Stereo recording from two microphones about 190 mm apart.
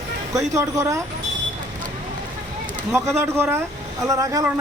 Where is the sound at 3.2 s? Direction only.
10° right (ahead or behind).